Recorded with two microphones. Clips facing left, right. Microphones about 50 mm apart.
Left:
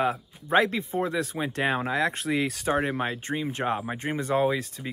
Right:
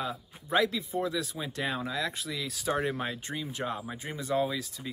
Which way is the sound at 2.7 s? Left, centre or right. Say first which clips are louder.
Left 2 dB; left.